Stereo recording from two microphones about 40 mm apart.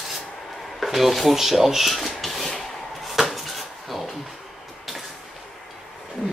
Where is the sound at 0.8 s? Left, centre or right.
Centre.